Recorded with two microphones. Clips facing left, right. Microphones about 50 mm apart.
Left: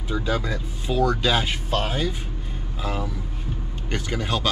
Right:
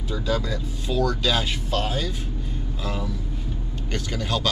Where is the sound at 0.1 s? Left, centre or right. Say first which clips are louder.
Left 1 dB; left.